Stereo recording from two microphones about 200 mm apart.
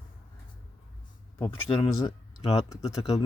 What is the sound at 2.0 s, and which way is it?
Speech, 25° left (ahead or behind).